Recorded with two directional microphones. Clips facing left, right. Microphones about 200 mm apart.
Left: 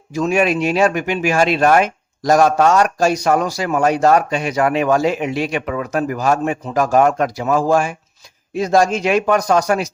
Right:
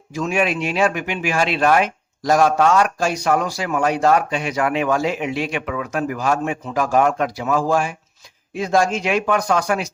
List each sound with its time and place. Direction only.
0.1 s speech: 40° left (ahead or behind)